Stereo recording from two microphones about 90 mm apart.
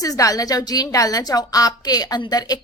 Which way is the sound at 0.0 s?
40° left (ahead or behind).